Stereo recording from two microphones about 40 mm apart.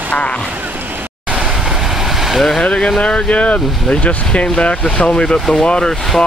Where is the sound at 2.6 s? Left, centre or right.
Left.